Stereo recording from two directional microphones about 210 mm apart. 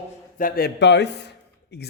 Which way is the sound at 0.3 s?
40° left (ahead or behind).